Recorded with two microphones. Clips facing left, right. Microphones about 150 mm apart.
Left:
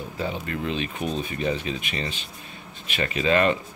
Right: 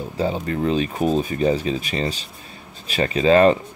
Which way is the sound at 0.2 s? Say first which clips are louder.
Right 7 dB; 35° right (ahead or behind).